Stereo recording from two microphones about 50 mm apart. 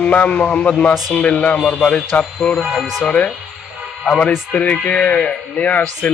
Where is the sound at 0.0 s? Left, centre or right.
Left.